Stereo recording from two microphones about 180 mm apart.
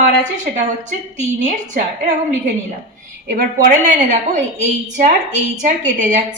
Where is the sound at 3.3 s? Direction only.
50° right (ahead or behind).